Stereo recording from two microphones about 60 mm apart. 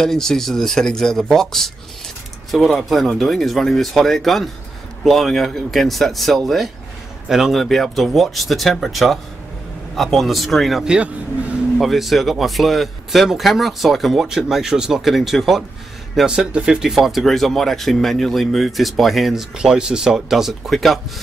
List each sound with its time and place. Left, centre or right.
0.0 s speech: centre
10.8 s speech: centre
11.8 s speech: centre
16.3 s speech: centre
19.5 s speech: centre